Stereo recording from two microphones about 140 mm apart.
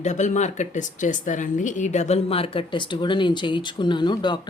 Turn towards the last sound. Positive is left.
turn(degrees=35)  # may be behind; listen again after turning